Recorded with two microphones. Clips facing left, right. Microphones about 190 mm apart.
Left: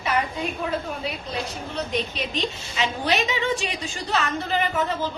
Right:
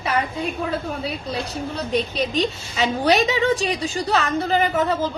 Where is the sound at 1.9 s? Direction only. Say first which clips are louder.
Right 7 dB; 35° right (ahead or behind).